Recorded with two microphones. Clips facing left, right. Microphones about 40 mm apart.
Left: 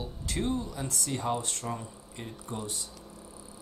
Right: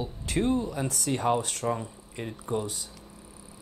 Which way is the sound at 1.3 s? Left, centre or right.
Right.